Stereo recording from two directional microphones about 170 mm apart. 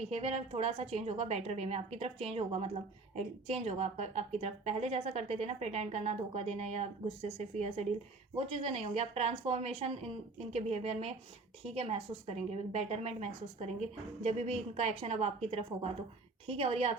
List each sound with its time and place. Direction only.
0.1 s a woman's voice: 35° right (ahead or behind)